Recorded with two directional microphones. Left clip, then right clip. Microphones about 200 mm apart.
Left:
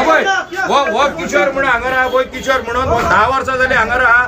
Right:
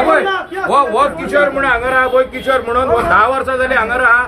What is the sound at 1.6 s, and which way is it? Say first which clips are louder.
A man's voice: right 1 dB; 5° left (ahead or behind).